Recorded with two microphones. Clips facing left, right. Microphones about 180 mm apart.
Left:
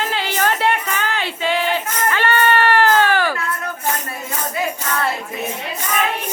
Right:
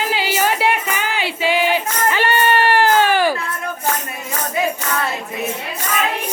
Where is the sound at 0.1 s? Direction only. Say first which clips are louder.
Right 2 dB; 5° right (ahead or behind).